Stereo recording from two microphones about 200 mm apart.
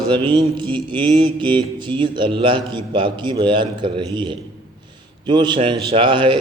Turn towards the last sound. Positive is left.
turn(degrees=-25)  # may be behind; listen again after turning